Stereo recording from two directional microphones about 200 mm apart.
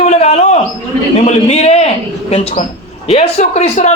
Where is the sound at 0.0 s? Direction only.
30° left (ahead or behind).